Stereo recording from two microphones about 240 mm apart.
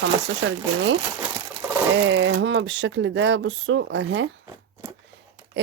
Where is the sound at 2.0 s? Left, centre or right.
Right.